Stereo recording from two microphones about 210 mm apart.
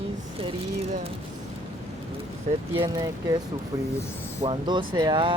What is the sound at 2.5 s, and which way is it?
Speech, 20° right (ahead or behind).